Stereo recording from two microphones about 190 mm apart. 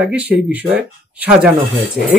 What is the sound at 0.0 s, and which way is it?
Speech, 10° right (ahead or behind).